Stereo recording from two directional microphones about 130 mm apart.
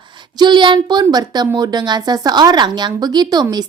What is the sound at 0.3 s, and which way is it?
A woman's voice, 35° right (ahead or behind).